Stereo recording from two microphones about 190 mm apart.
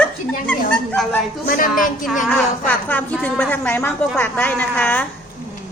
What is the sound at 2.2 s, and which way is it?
A woman's voice, 10° left (ahead or behind).